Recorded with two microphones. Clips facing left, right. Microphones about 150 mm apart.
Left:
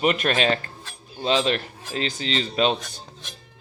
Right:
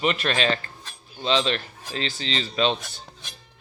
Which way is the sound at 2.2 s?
35° right (ahead or behind).